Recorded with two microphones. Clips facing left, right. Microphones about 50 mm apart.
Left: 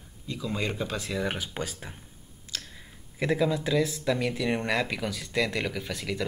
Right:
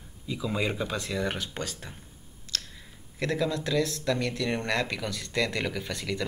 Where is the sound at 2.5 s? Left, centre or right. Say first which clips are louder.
Right 2 dB; centre.